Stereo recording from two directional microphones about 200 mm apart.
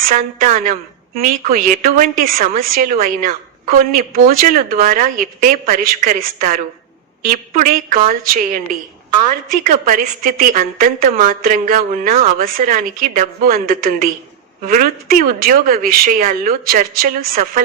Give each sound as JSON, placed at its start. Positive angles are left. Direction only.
{"t": 0.0, "sound": "a woman's voice", "side_deg": -45}
{"t": 9.8, "sound": "a woman's voice", "side_deg": -45}